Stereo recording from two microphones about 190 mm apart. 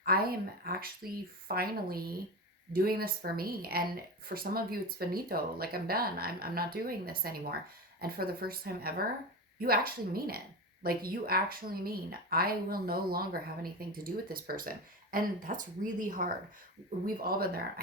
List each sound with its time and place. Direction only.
0.0 s speech: 50° right (ahead or behind)